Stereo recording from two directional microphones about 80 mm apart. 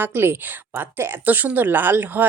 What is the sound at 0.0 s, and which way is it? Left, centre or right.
A woman's voice, right.